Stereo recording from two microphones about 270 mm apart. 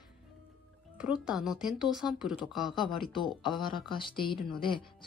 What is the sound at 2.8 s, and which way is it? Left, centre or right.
Speech, centre.